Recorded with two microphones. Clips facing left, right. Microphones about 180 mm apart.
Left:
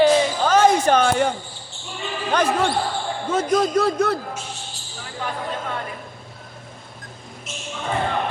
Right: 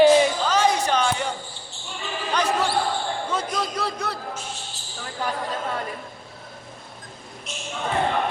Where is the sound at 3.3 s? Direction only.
50° left (ahead or behind).